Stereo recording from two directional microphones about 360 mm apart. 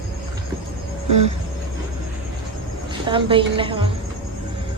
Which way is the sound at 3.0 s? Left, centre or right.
Centre.